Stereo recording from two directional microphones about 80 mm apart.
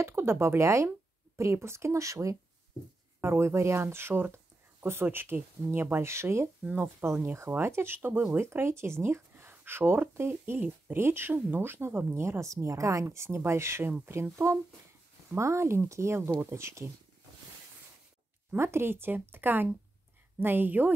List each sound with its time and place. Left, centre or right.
0.0 s speech: right
3.2 s speech: right
6.6 s speech: right
15.3 s speech: right
18.6 s speech: right